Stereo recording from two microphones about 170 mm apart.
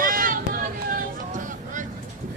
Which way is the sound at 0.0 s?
55° right (ahead or behind).